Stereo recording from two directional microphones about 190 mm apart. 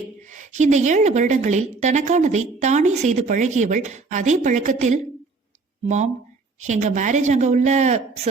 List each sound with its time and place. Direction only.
0.2 s a woman's voice: 40° right (ahead or behind)